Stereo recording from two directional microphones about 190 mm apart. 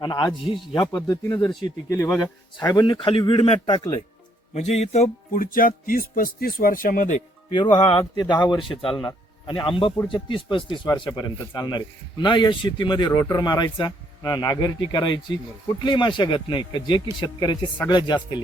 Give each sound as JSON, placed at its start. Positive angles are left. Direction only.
{"t": 0.0, "sound": "a man's voice", "side_deg": 25}
{"t": 0.3, "sound": "speech", "side_deg": 0}
{"t": 0.8, "sound": "a man's voice", "side_deg": 20}
{"t": 7.5, "sound": "a man's voice", "side_deg": 25}